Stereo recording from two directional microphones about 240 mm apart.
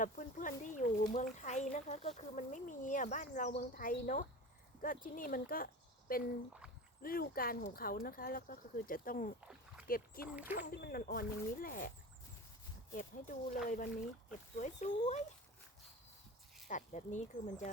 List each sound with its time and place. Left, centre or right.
0.0 s speech: left
16.6 s speech: left